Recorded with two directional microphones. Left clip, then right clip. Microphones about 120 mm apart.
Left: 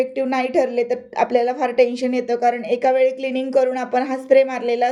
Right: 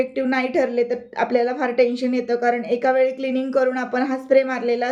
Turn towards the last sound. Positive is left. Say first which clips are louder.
# left 3 dB
turn(degrees=25)  # may be behind; listen again after turning